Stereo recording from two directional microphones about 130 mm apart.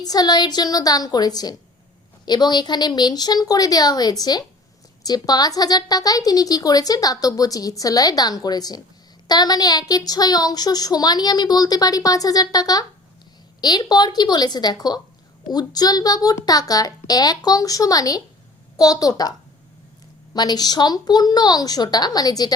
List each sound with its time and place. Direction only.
0.0 s a woman's voice: 30° left (ahead or behind)
20.3 s a woman's voice: 30° left (ahead or behind)